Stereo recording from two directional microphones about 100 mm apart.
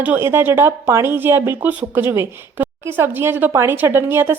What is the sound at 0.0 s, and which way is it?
Speech, 20° right (ahead or behind).